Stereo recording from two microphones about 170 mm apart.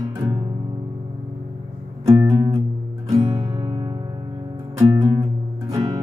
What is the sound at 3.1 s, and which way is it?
Music, 35° right (ahead or behind).